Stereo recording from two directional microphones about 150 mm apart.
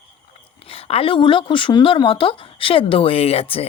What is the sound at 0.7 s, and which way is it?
Speech, 40° left (ahead or behind).